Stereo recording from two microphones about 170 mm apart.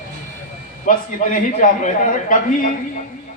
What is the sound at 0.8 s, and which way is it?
A man's voice, 50° left (ahead or behind).